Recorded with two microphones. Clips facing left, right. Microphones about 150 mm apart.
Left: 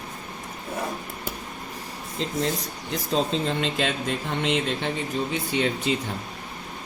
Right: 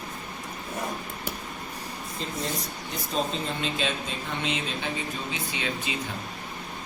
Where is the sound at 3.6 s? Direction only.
85° left.